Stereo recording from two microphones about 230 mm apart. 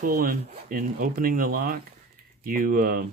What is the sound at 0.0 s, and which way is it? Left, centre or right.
Speech, right.